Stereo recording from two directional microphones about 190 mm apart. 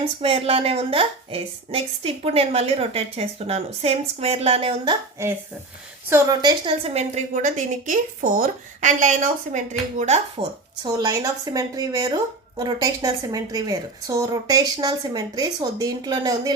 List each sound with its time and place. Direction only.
0.2 s a woman's voice: 30° right (ahead or behind)
6.1 s a woman's voice: 15° right (ahead or behind); by 10.5 s 30° right (ahead or behind)
10.8 s speech: 20° right (ahead or behind)